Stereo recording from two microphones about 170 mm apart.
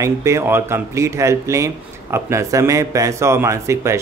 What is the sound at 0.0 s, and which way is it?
A man's voice, 15° right (ahead or behind).